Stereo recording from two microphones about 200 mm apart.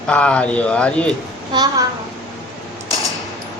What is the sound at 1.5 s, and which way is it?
Speech, 20° right (ahead or behind).